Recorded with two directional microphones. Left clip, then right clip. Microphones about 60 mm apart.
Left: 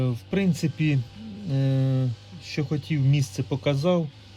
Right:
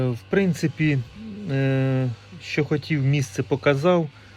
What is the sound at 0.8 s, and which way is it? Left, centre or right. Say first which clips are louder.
Speech: right 4 dB; right.